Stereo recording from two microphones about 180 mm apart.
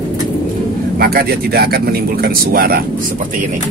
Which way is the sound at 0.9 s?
60° right (ahead or behind).